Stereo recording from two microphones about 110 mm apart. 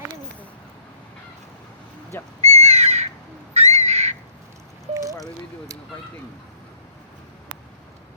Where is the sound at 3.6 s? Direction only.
75° right (ahead or behind).